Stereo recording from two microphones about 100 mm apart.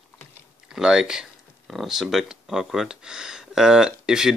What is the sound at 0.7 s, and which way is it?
Speech, 5° right (ahead or behind).